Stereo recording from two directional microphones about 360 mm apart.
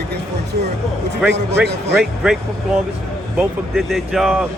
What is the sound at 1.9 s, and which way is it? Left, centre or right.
Speech, centre.